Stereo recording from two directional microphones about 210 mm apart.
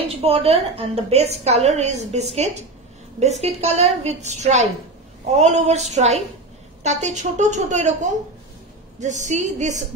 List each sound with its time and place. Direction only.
0.0 s a woman's voice: 30° right (ahead or behind)